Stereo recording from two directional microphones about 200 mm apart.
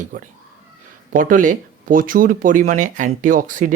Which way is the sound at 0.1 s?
40° right (ahead or behind).